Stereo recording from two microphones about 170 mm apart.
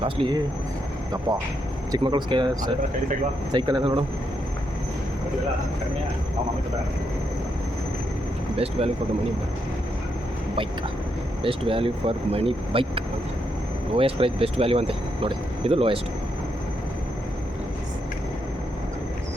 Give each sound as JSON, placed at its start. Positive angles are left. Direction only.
{"t": 0.0, "sound": "speech", "side_deg": -30}
{"t": 1.9, "sound": "speech", "side_deg": -25}
{"t": 8.5, "sound": "speech", "side_deg": -35}
{"t": 11.4, "sound": "speech", "side_deg": -35}
{"t": 13.9, "sound": "speech", "side_deg": -30}